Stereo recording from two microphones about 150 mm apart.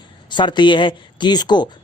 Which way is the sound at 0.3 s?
30° left (ahead or behind).